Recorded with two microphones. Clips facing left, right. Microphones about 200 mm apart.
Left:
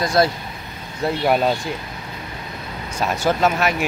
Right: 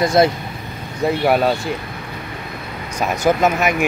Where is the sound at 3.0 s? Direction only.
15° right (ahead or behind).